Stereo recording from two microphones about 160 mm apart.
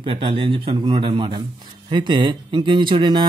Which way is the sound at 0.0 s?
35° right (ahead or behind).